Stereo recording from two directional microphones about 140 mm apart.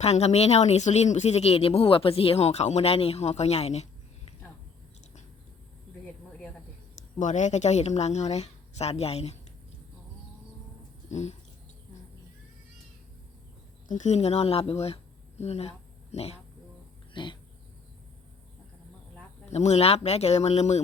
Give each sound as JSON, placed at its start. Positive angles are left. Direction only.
{"t": 0.0, "sound": "speech", "side_deg": 50}
{"t": 7.2, "sound": "speech", "side_deg": 60}
{"t": 11.1, "sound": "speech", "side_deg": 55}
{"t": 13.8, "sound": "speech", "side_deg": 65}
{"t": 17.2, "sound": "a sound", "side_deg": 35}
{"t": 19.5, "sound": "speech", "side_deg": 50}